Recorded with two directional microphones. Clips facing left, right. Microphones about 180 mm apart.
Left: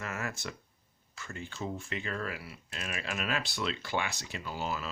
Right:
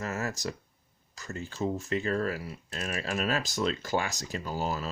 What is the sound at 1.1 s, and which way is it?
Speech, 40° right (ahead or behind).